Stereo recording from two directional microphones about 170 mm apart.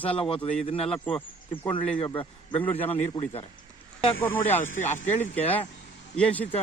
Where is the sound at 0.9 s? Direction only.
5° left (ahead or behind).